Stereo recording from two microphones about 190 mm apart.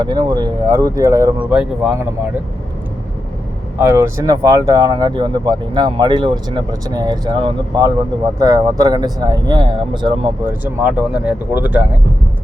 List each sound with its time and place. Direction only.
0.0 s speech: 20° right (ahead or behind); by 2.0 s 5° right (ahead or behind)
3.8 s speech: 15° right (ahead or behind)
10.4 s speech: 10° right (ahead or behind)